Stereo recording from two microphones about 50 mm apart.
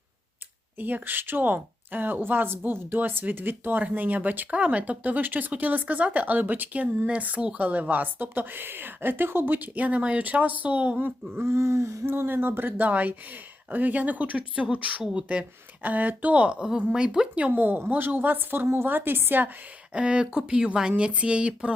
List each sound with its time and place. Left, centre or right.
0.8 s speech: right
9.6 s speech: right
11.4 s a sound: right
12.0 s a woman's voice: right
15.8 s a woman's voice: right; by 17.2 s centre
17.5 s a woman's voice: right
19.9 s a woman's voice: right